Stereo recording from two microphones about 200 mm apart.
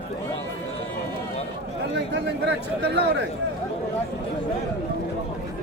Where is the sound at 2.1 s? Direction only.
55° right (ahead or behind).